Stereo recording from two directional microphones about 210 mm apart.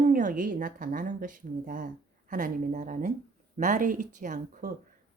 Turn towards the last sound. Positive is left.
turn(degrees=-40)  # may be behind; listen again after turning